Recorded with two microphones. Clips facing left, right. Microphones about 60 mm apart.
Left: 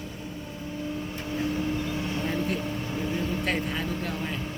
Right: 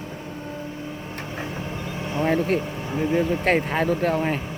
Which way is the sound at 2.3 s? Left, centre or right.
Right.